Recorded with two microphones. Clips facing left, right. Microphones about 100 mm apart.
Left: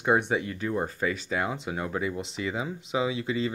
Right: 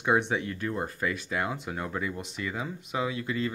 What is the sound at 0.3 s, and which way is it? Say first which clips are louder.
Speech: left 2 dB; 5° left (ahead or behind).